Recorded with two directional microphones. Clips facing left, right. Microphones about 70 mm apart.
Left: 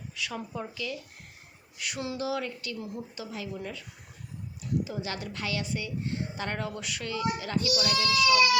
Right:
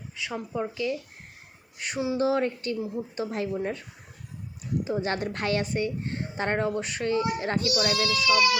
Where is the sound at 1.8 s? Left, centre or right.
Right.